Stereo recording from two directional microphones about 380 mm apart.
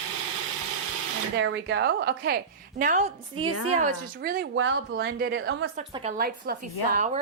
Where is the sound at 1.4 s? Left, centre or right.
Right.